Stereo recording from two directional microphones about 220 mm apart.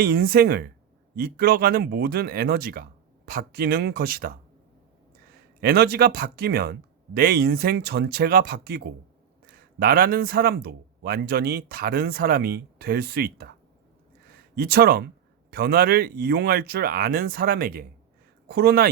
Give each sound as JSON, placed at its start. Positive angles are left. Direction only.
{"t": 0.0, "sound": "speech", "side_deg": -45}
{"t": 5.5, "sound": "speech", "side_deg": -45}
{"t": 14.3, "sound": "a sound", "side_deg": -45}
{"t": 15.4, "sound": "speech", "side_deg": -45}